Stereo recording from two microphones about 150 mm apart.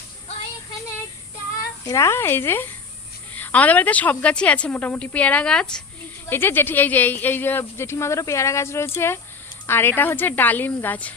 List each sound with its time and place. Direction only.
1.8 s speech: 20° left (ahead or behind)